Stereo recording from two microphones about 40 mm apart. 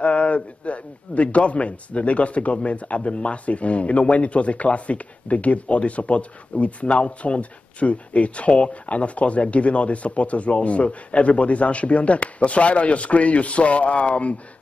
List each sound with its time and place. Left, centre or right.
0.0 s a man's voice: left